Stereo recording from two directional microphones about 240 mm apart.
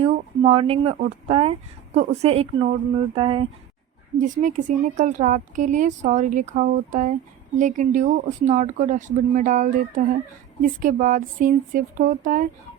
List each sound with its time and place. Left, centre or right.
0.0 s speech: right
4.2 s speech: right